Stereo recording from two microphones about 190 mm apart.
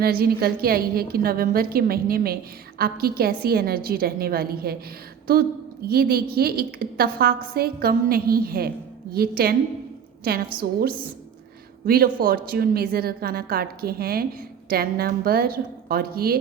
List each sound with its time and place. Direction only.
0.0 s a woman's voice: 55° right (ahead or behind)
5.9 s a woman's voice: 55° right (ahead or behind)